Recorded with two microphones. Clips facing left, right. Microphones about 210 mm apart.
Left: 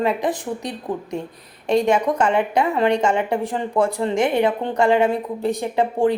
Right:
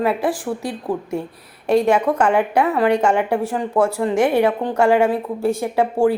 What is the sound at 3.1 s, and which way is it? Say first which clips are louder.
Speech: right 2 dB; 15° left (ahead or behind).